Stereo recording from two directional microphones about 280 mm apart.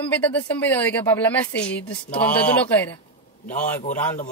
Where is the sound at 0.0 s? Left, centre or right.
Centre.